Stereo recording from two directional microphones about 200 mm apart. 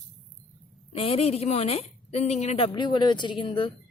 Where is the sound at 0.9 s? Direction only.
30° left (ahead or behind).